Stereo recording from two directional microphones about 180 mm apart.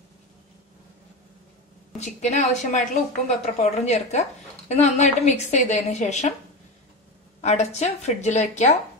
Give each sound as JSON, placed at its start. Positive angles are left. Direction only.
{"t": 2.0, "sound": "a woman's voice", "side_deg": 40}
{"t": 7.4, "sound": "a woman's voice", "side_deg": 40}